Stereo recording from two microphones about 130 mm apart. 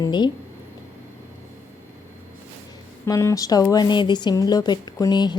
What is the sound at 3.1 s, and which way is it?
Speech, 25° left (ahead or behind).